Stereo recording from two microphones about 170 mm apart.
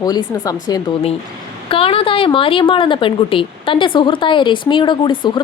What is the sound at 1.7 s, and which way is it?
A woman's voice, 35° left (ahead or behind).